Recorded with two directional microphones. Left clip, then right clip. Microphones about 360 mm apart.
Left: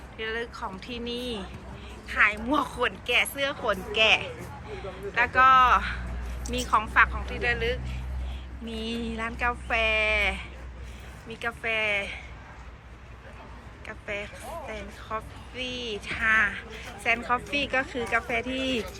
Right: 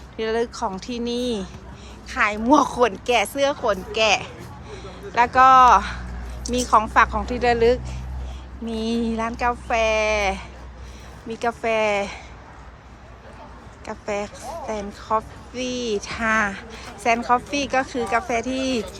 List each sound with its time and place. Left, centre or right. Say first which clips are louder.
0.2 s a woman's voice: right 9 dB; centre
13.8 s a woman's voice: right 7 dB; centre